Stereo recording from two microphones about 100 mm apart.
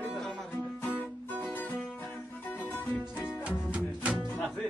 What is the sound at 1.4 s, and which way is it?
Music, 15° left (ahead or behind).